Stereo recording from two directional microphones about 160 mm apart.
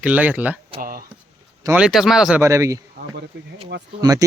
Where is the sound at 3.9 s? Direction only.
20° right (ahead or behind).